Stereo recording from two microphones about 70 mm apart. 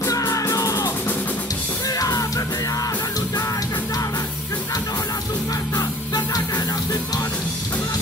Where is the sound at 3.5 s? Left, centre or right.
Left.